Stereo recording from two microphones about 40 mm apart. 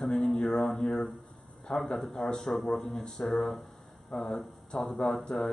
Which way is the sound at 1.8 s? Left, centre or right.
Centre.